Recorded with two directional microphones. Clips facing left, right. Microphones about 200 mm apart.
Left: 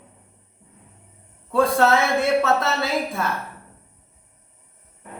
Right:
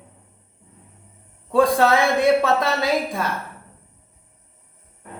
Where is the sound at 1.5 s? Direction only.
15° right (ahead or behind).